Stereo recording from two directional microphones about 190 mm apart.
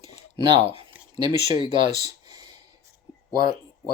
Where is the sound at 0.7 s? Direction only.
30° right (ahead or behind).